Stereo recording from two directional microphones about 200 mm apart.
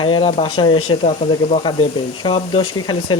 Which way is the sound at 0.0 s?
25° left (ahead or behind).